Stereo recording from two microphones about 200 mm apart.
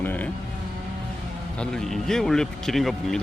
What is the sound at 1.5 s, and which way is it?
Speech, 5° left (ahead or behind).